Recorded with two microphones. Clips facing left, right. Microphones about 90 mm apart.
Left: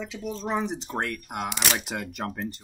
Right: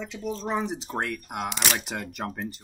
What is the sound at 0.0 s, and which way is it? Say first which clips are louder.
Speech: right 1 dB; centre (ahead or behind).